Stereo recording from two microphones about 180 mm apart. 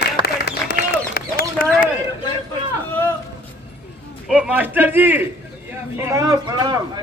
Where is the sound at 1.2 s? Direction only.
55° left (ahead or behind).